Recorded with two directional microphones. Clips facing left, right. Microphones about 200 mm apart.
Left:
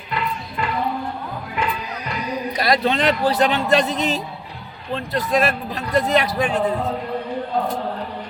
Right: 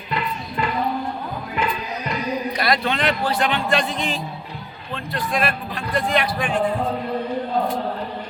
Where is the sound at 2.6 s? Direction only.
35° left (ahead or behind).